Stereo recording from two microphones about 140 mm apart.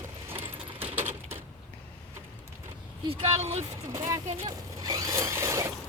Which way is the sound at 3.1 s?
45° right (ahead or behind).